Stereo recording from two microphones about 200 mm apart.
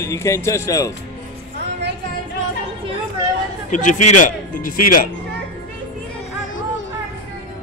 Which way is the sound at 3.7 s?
40° left (ahead or behind).